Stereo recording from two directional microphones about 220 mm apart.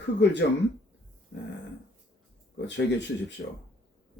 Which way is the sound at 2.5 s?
50° left (ahead or behind).